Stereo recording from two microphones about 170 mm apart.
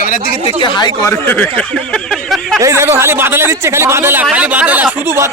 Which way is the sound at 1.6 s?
5° left (ahead or behind).